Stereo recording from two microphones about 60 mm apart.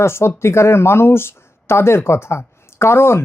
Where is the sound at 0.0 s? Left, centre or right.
Left.